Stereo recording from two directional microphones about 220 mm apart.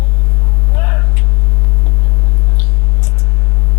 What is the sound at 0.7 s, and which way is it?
Vehicle, 15° left (ahead or behind).